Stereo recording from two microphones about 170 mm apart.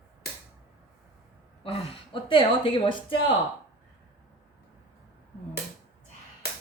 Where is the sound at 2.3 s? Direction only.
30° left (ahead or behind).